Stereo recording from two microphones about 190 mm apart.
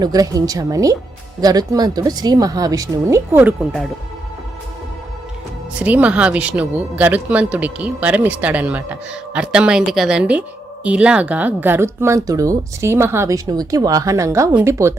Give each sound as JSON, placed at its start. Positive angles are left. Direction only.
{"t": 0.0, "sound": "speech", "side_deg": -20}
{"t": 5.8, "sound": "speech", "side_deg": -5}